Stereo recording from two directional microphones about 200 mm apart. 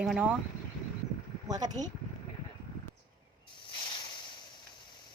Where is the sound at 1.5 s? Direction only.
20° right (ahead or behind).